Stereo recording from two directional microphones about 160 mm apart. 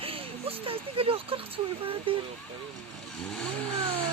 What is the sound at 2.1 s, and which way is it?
Speech, 35° right (ahead or behind).